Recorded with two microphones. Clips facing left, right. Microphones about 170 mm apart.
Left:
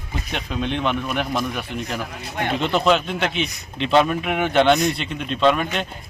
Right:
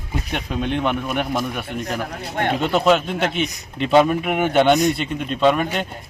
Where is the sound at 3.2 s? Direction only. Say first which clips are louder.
Right 2 dB; 50° right (ahead or behind).